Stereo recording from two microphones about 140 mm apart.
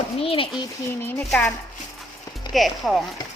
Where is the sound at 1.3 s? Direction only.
10° left (ahead or behind).